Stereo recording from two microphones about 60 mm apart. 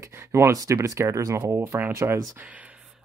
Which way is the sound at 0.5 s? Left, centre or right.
Right.